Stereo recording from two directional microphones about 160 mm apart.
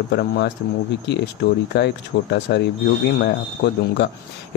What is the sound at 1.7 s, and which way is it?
Speech, 90° left.